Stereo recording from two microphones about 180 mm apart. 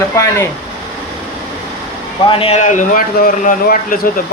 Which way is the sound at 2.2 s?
35° left (ahead or behind).